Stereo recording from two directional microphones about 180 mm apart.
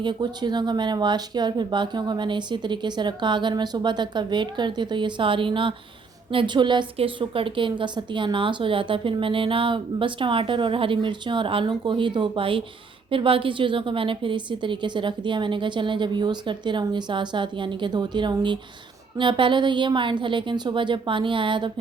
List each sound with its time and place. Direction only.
0.0 s a woman's voice: 25° right (ahead or behind)